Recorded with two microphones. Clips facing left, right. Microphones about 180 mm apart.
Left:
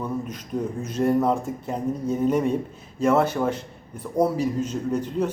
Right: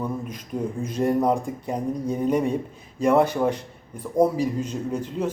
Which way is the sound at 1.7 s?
10° right (ahead or behind).